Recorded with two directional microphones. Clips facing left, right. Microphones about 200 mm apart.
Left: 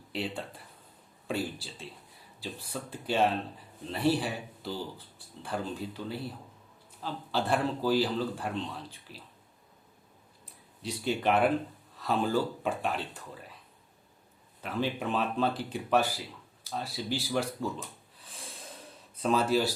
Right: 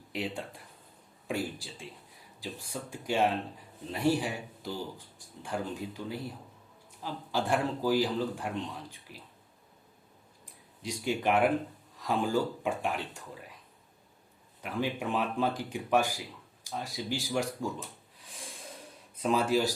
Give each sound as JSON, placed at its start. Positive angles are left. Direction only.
{"t": 0.1, "sound": "speech", "side_deg": -15}
{"t": 1.3, "sound": "a sound", "side_deg": -15}
{"t": 2.9, "sound": "speech", "side_deg": -15}
{"t": 10.8, "sound": "speech", "side_deg": -15}
{"t": 14.6, "sound": "speech", "side_deg": -15}
{"t": 19.2, "sound": "speech", "side_deg": -15}